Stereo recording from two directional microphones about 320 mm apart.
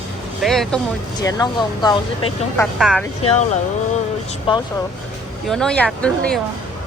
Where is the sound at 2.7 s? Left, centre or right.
Centre.